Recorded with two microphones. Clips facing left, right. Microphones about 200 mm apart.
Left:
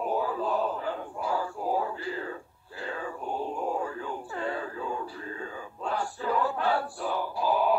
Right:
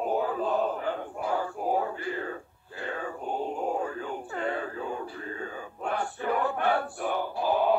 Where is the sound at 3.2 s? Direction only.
20° right (ahead or behind).